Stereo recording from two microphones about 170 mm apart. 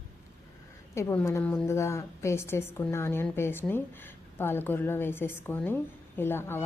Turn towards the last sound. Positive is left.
turn(degrees=15)  # may be behind; listen again after turning